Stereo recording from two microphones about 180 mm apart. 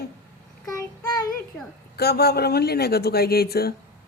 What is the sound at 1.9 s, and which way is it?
A woman's voice, 60° left (ahead or behind).